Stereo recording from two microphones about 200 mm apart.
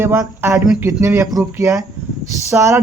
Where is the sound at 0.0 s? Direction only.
10° right (ahead or behind).